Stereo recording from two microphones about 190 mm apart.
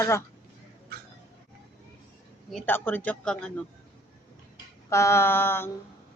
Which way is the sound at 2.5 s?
10° left (ahead or behind).